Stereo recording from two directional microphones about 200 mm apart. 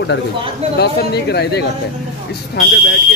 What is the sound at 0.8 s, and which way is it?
Speech, 55° left (ahead or behind).